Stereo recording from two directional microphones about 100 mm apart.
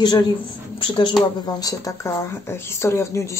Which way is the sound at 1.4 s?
40° left (ahead or behind).